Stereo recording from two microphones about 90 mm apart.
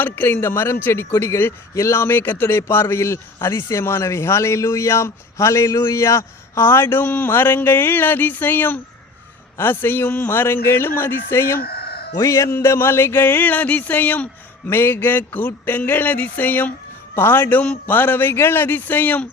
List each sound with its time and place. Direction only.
0.0 s a man's voice: 25° left (ahead or behind)